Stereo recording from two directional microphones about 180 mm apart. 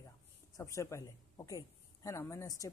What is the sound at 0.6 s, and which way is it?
Speech, 15° left (ahead or behind).